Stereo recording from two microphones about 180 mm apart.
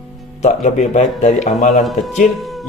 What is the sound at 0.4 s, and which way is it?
Speech, 40° left (ahead or behind).